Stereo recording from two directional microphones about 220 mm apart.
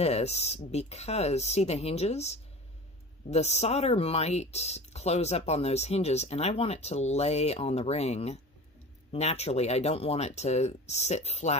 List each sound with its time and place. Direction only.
0.0 s speech: 30° left (ahead or behind)